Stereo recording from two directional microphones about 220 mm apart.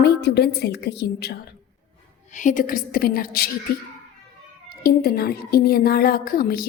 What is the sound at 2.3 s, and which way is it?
A woman's voice, 35° left (ahead or behind).